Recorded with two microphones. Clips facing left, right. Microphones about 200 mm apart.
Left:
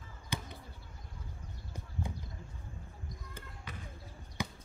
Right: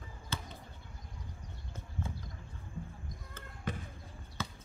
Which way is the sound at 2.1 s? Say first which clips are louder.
Left 1 dB; 15° left (ahead or behind).